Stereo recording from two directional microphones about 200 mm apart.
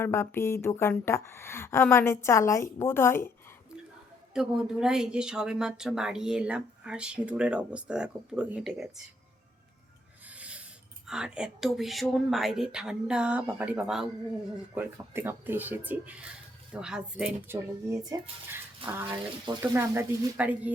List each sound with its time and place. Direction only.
0.0 s speech: 10° left (ahead or behind)
4.4 s a woman's voice: 5° right (ahead or behind)
10.2 s speech: 5° right (ahead or behind)